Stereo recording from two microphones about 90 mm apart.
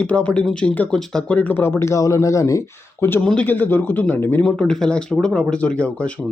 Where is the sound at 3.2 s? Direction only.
15° left (ahead or behind).